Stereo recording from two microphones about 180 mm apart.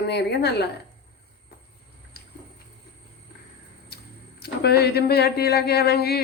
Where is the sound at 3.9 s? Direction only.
60° left (ahead or behind).